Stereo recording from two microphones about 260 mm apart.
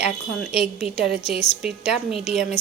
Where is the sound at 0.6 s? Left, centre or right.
Centre.